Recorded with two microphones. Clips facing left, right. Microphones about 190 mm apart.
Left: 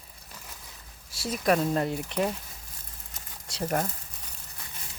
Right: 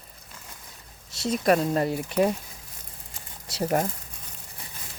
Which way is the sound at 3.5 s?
10° right (ahead or behind).